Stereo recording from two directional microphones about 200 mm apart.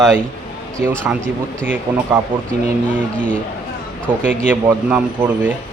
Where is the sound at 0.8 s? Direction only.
10° right (ahead or behind).